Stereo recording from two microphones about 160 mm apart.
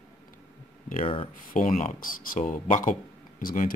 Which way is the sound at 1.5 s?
55° left (ahead or behind).